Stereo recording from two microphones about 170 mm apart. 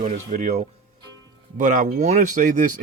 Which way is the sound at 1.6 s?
50° right (ahead or behind).